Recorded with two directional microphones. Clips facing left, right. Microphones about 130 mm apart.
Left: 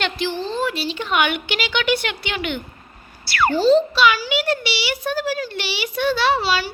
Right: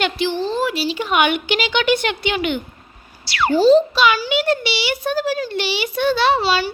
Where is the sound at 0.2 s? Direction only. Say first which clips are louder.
Right 3 dB; centre (ahead or behind).